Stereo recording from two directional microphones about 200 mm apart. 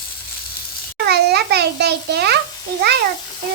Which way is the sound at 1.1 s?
55° right (ahead or behind).